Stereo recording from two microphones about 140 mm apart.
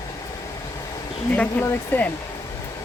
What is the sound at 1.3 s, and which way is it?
Speech, 10° left (ahead or behind).